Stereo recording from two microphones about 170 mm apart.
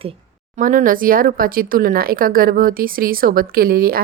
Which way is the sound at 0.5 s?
50° right (ahead or behind).